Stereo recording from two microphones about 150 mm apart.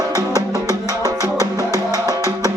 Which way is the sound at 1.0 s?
20° left (ahead or behind).